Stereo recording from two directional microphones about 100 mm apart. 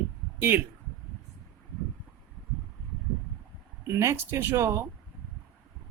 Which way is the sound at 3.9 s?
25° right (ahead or behind).